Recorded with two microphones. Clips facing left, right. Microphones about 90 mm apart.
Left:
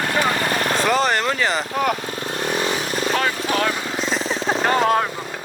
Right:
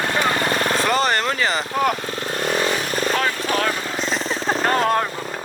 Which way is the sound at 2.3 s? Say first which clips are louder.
Right 1 dB; 45° right (ahead or behind).